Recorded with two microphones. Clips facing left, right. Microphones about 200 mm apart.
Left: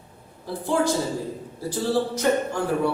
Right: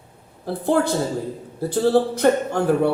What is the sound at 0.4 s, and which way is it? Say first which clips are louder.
A man's voice: right 3 dB; 60° right (ahead or behind).